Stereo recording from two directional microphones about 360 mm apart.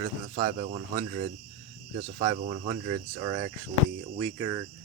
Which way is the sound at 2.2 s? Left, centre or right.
Centre.